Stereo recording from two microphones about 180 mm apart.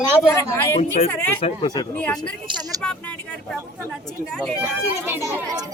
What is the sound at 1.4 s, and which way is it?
Speech, 25° left (ahead or behind).